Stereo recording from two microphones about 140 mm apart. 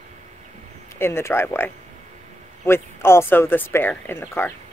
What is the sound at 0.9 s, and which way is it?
Speech, 15° left (ahead or behind).